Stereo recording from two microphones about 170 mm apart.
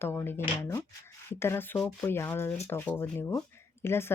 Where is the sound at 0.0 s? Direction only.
15° left (ahead or behind).